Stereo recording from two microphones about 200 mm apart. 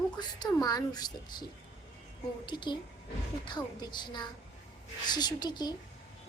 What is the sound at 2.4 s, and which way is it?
A woman's voice, 25° left (ahead or behind).